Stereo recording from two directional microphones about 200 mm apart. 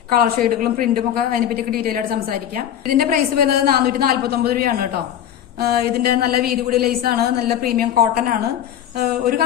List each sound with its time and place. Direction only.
0.1 s a woman's voice: 45° right (ahead or behind)